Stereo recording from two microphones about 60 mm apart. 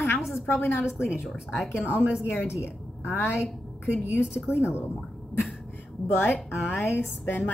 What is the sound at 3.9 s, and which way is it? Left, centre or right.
Speech, left.